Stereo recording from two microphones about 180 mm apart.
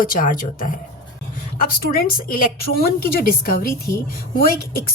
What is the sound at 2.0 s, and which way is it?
A woman's voice, 50° left (ahead or behind).